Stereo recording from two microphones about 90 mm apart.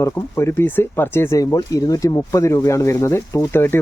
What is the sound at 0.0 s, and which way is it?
Speech, 30° left (ahead or behind).